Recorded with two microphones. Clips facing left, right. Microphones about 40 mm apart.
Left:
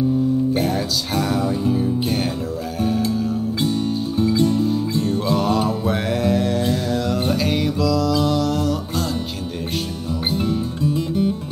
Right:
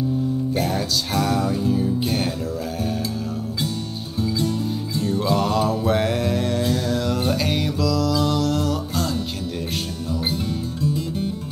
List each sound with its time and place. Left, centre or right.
0.5 s music: centre
4.2 s music: left
5.3 s mantra: centre
10.3 s music: left